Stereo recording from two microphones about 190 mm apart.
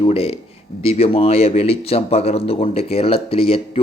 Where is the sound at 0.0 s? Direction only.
30° left (ahead or behind).